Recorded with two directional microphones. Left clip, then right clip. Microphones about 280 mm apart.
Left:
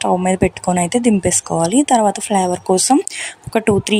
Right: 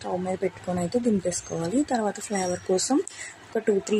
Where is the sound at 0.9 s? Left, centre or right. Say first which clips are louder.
Left 9 dB; left.